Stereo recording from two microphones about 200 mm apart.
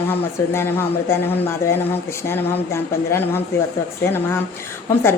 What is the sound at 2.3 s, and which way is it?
A woman's voice, 10° left (ahead or behind).